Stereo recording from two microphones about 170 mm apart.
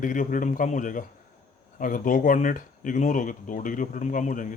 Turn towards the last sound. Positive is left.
turn(degrees=50)  # may be behind; listen again after turning